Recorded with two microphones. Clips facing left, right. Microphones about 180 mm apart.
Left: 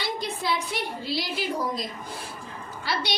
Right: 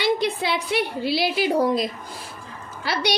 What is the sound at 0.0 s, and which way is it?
A woman's voice, 70° right (ahead or behind).